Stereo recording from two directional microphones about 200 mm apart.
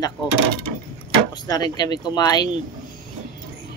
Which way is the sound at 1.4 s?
20° left (ahead or behind).